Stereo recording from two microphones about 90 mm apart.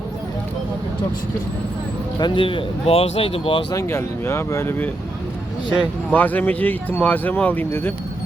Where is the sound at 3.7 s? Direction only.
30° left (ahead or behind).